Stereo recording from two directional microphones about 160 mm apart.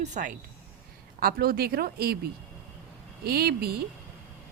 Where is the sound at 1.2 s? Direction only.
70° right (ahead or behind).